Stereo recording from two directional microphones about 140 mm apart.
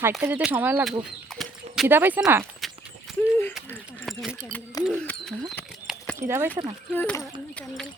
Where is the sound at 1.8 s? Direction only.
15° right (ahead or behind).